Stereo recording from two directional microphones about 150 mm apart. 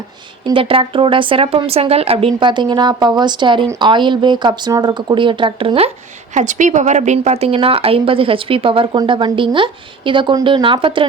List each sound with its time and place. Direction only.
0.4 s a woman's voice: 35° right (ahead or behind)
6.3 s a woman's voice: 55° right (ahead or behind); by 11.0 s 35° right (ahead or behind)